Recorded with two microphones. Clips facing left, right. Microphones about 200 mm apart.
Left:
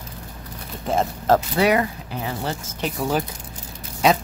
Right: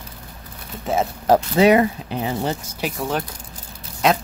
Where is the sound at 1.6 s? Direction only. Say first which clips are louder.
Right 5 dB; 20° right (ahead or behind).